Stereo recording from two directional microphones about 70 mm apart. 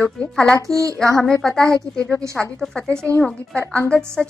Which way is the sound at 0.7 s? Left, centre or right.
Right.